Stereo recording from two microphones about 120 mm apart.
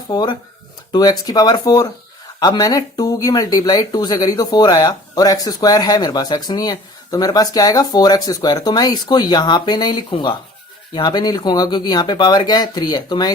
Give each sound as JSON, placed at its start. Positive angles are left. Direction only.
{"t": 0.1, "sound": "speech", "side_deg": 40}